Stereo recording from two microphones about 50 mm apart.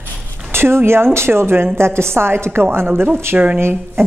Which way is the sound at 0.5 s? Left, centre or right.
Right.